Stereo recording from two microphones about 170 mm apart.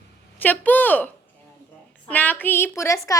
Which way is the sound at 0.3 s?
10° left (ahead or behind).